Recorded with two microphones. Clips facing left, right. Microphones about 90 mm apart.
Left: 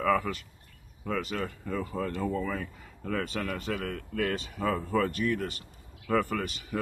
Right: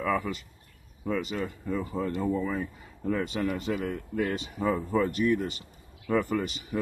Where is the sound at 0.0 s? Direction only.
10° right (ahead or behind).